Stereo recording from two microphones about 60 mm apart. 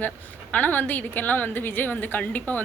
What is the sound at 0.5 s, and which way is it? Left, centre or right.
A woman's voice, left.